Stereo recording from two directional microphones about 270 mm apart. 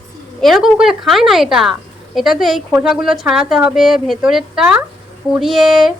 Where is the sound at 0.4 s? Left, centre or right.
Centre.